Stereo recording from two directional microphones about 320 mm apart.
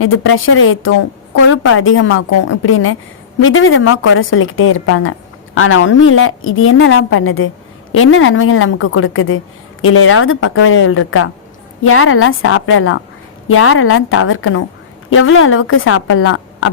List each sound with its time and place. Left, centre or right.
0.0 s a woman's voice: left